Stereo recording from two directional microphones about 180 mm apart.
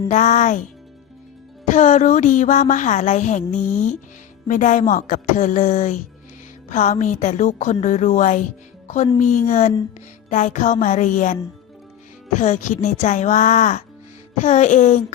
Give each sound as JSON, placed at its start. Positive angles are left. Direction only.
{"t": 0.1, "sound": "music", "side_deg": 40}
{"t": 1.7, "sound": "a woman's voice", "side_deg": 40}
{"t": 12.4, "sound": "a woman's voice", "side_deg": 45}
{"t": 14.3, "sound": "music", "side_deg": 40}